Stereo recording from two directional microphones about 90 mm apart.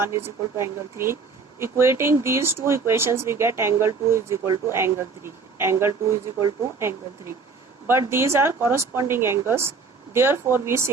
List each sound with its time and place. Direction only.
0.0 s speech: 30° right (ahead or behind)